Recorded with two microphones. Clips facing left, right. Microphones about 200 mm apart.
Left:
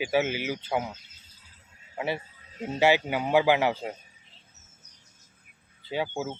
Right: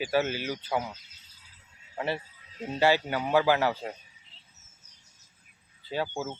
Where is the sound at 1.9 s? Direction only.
15° left (ahead or behind).